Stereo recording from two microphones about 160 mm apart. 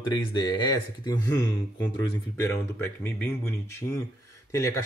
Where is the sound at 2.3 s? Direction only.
15° left (ahead or behind).